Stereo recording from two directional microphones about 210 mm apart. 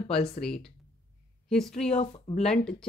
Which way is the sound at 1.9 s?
30° left (ahead or behind).